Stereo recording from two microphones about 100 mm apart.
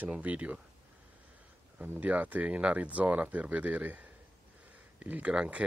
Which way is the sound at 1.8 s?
15° right (ahead or behind).